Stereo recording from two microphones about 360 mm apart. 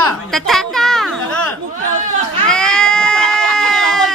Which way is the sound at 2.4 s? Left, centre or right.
Centre.